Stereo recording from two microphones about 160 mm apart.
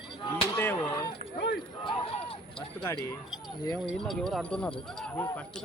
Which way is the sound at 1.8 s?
35° left (ahead or behind).